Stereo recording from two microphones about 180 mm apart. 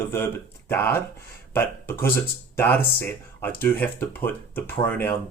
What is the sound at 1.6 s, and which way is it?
Speech, 10° left (ahead or behind).